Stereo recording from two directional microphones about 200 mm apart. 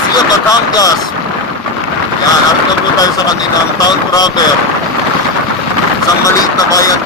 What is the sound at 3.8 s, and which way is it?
Speech, 20° left (ahead or behind).